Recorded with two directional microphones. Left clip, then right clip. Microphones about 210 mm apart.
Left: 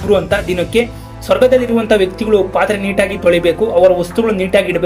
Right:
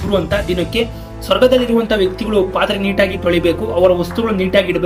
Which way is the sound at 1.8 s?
25° left (ahead or behind).